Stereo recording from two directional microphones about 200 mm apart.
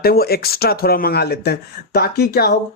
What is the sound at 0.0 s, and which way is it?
Speech, 50° left (ahead or behind).